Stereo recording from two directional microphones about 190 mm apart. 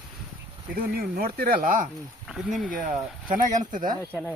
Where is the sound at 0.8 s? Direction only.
50° right (ahead or behind).